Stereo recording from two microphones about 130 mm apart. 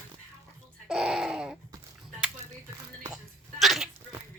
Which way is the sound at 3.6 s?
Centre (ahead or behind).